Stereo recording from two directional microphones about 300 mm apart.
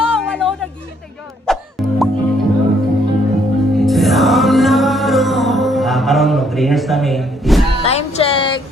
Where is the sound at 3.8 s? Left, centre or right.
Centre.